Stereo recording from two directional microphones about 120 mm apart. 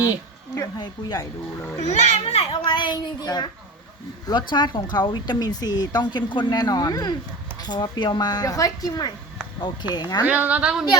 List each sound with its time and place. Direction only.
0.5 s speech: 30° left (ahead or behind)
1.8 s a child's voice: 70° left (ahead or behind)
2.5 s speech: 40° left (ahead or behind)
10.2 s a woman's voice: 10° right (ahead or behind)